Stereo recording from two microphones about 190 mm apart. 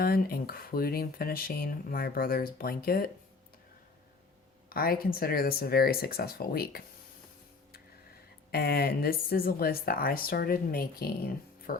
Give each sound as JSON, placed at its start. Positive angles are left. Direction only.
{"t": 0.0, "sound": "speech", "side_deg": 50}
{"t": 4.7, "sound": "speech", "side_deg": 50}
{"t": 8.5, "sound": "speech", "side_deg": 55}